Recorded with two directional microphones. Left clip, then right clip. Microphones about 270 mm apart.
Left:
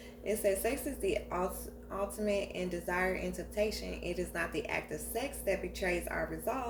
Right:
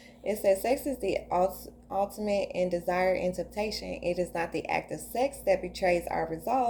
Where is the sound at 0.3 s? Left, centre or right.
Right.